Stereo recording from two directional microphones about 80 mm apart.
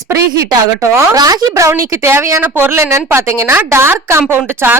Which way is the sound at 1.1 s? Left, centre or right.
Right.